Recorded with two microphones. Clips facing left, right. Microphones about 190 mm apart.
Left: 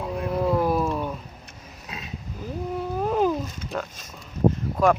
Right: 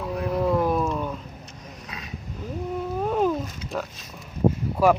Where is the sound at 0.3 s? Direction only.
5° left (ahead or behind).